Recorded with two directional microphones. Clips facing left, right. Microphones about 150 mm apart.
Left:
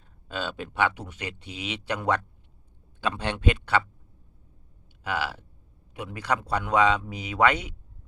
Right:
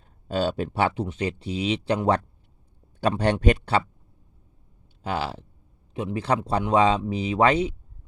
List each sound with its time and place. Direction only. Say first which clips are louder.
0.3 s speech: right 8 dB; 40° right (ahead or behind)
3.0 s speech: right 6 dB; 40° right (ahead or behind)
5.0 s a man's voice: right 2 dB; 30° right (ahead or behind)